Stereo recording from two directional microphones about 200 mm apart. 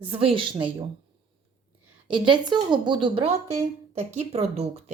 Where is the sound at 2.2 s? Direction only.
25° right (ahead or behind).